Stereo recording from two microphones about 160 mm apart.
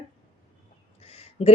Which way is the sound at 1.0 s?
40° left (ahead or behind).